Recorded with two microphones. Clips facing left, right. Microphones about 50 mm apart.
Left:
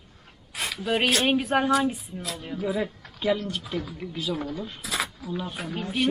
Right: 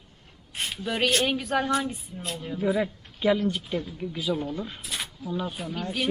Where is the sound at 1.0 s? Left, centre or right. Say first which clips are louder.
Left 1 dB; left.